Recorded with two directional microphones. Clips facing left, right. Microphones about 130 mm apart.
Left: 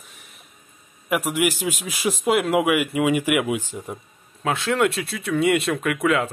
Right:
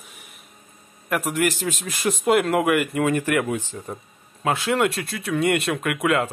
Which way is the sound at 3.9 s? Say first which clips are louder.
Even; centre (ahead or behind).